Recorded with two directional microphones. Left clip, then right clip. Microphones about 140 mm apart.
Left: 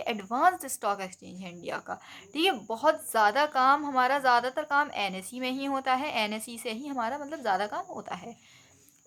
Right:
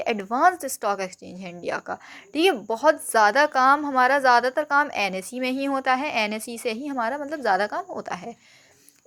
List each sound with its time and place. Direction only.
0.0 s a woman's voice: 35° right (ahead or behind)